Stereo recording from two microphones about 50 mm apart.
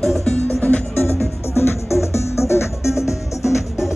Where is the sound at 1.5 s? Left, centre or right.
Left.